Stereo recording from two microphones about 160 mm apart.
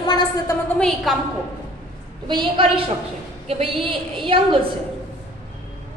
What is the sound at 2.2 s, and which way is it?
A woman's voice, 30° right (ahead or behind).